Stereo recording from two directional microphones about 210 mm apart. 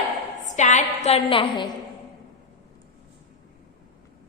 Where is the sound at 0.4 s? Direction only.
35° left (ahead or behind).